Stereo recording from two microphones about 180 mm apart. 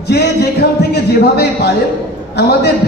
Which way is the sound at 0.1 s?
65° left (ahead or behind).